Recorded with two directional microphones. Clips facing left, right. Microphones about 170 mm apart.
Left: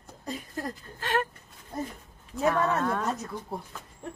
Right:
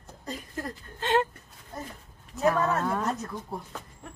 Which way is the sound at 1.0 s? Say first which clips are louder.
Right 4 dB; 25° right (ahead or behind).